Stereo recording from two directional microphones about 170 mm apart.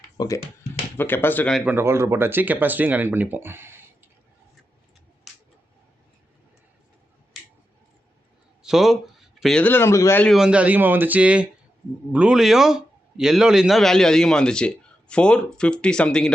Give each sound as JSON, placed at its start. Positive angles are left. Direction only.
{"t": 0.2, "sound": "speech", "side_deg": 25}
{"t": 0.9, "sound": "speech", "side_deg": 10}
{"t": 1.5, "sound": "speech", "side_deg": -10}
{"t": 8.6, "sound": "speech", "side_deg": 0}
{"t": 10.3, "sound": "a man's voice", "side_deg": -5}